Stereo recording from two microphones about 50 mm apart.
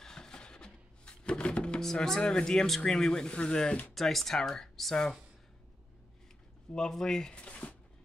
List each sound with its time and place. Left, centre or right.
0.0 s a sound: centre
2.8 s speech: centre
3.9 s speech: centre
6.7 s speech: centre; by 7.7 s left